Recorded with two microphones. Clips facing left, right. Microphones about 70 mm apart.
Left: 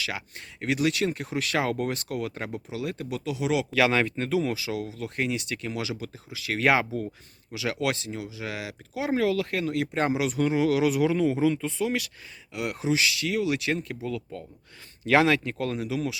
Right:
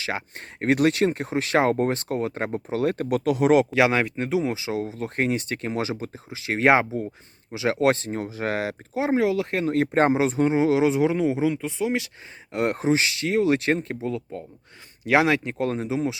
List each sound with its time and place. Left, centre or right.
0.6 s speech: right
3.7 s speech: right
12.5 s speech: right
15.0 s speech: centre